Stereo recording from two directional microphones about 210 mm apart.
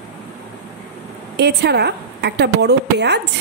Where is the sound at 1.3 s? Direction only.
50° right (ahead or behind).